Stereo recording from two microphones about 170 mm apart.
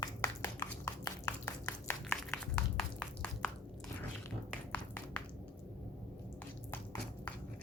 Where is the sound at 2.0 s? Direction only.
5° left (ahead or behind).